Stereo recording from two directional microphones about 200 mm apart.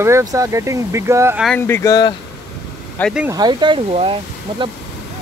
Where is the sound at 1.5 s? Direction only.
10° left (ahead or behind).